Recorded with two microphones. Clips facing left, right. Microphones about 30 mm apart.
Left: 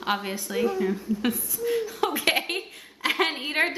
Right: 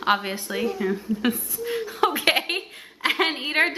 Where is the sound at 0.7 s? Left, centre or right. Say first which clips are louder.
Right 1 dB; centre.